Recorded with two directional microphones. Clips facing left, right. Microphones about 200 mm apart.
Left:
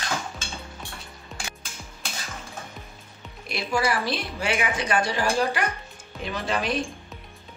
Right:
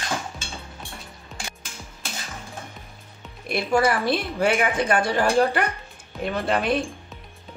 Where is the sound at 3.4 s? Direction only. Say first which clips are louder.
Right 5 dB; 55° right (ahead or behind).